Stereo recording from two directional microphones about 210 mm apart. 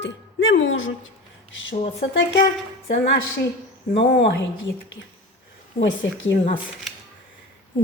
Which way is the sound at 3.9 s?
40° left (ahead or behind).